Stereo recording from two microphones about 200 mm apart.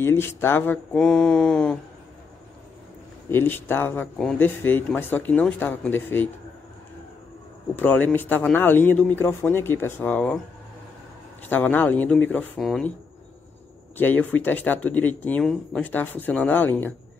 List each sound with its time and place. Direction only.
0.0 s speech: 10° left (ahead or behind)
3.3 s speech: 10° left (ahead or behind)
7.7 s speech: 10° left (ahead or behind)
11.4 s speech: 10° left (ahead or behind)
13.9 s speech: 10° left (ahead or behind)